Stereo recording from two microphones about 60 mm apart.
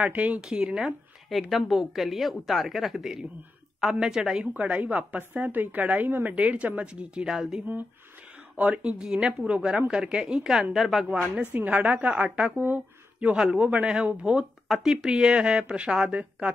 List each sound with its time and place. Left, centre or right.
0.0 s a woman's voice: right
0.4 s speech: centre
1.3 s a woman's voice: centre
4.6 s a woman's voice: right; by 7.6 s centre
8.5 s speech: right; by 11.1 s centre
11.5 s a woman's voice: right
13.3 s speech: centre
14.7 s speech: centre; by 16.5 s right